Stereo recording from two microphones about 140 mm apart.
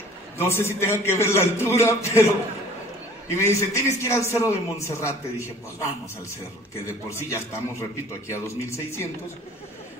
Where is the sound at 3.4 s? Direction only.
20° left (ahead or behind).